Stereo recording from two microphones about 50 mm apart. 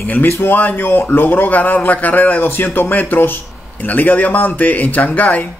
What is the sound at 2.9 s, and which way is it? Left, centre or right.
Speech, left.